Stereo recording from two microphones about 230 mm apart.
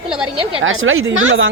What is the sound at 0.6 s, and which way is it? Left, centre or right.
Speech, right.